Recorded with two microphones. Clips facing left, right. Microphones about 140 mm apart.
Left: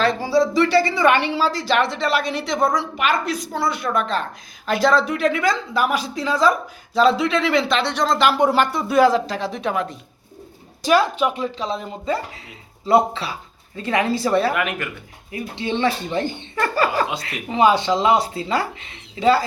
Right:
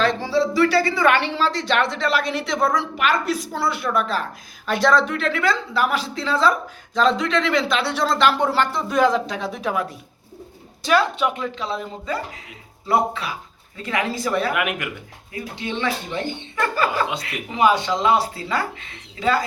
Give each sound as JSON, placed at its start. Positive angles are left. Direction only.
{"t": 0.0, "sound": "a woman's voice", "side_deg": 5}
{"t": 11.3, "sound": "speech", "side_deg": 30}
{"t": 14.5, "sound": "speech", "side_deg": -10}
{"t": 15.3, "sound": "speech", "side_deg": 25}